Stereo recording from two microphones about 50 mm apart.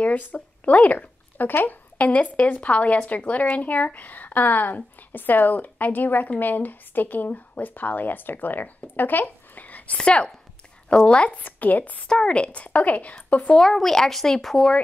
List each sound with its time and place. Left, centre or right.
0.0 s a sound: left
1.5 s a woman's voice: left
9.9 s speech: left
11.3 s speech: left
12.1 s speech: centre
12.6 s speech: left
13.6 s speech: centre